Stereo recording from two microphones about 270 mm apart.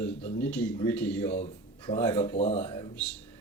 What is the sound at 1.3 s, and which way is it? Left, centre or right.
Speech, left.